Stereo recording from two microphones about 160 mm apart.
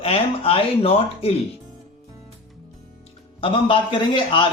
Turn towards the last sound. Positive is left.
turn(degrees=30)  # may be behind; listen again after turning